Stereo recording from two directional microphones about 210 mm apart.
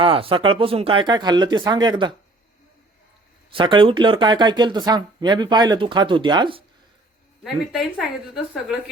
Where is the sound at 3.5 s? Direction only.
25° right (ahead or behind).